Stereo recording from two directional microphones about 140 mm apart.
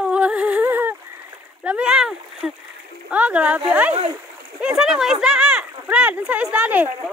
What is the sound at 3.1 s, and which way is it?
Speech, 10° right (ahead or behind).